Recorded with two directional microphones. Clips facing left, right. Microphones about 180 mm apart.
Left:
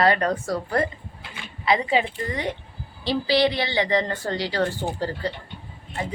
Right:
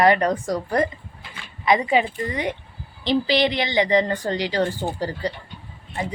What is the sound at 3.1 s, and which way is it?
A woman's voice, 20° right (ahead or behind).